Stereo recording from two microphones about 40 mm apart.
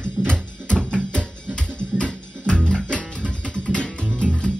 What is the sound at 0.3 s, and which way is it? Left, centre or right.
Music, left.